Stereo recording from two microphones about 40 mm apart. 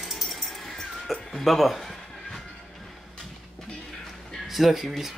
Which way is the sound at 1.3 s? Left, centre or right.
Centre.